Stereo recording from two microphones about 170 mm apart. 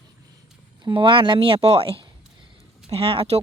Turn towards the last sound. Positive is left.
turn(degrees=-35)  # may be behind; listen again after turning